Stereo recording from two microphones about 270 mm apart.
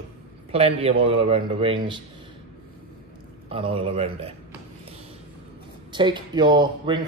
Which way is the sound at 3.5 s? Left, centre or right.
Right.